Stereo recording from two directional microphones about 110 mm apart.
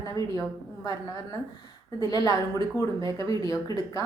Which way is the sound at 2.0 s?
35° left (ahead or behind).